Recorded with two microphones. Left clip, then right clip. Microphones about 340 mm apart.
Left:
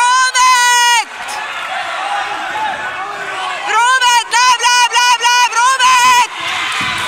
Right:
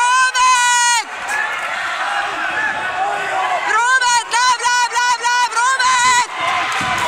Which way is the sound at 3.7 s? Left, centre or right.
Centre.